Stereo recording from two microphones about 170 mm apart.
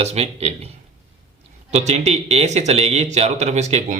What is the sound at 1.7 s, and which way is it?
Speech, 40° right (ahead or behind).